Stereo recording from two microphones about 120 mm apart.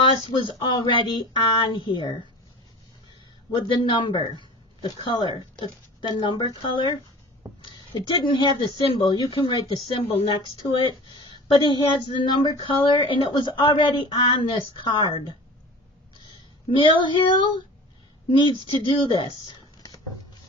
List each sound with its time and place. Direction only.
0.6 s a woman's voice: 45° left (ahead or behind)
16.2 s speech: 45° left (ahead or behind)